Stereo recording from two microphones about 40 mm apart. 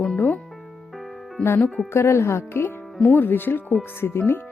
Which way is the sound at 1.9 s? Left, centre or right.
Left.